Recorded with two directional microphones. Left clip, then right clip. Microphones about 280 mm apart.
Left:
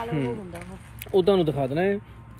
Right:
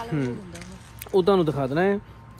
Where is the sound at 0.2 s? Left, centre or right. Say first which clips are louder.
Left 1 dB; centre.